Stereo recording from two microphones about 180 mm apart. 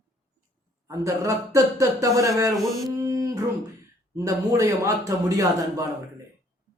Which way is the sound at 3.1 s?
20° right (ahead or behind).